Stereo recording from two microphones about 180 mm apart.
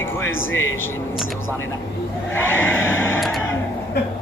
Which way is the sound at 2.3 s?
10° left (ahead or behind).